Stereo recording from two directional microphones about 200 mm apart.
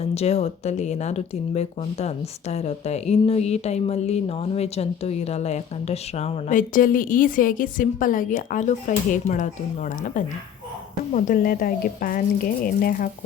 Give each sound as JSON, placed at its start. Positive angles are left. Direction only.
{"t": 0.0, "sound": "speech", "side_deg": 30}
{"t": 11.1, "sound": "a woman's voice", "side_deg": 45}